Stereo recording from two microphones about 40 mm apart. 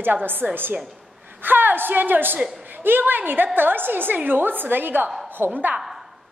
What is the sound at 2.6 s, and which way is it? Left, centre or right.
A woman's voice, right.